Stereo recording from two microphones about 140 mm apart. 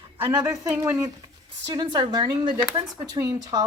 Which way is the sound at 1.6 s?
35° right (ahead or behind).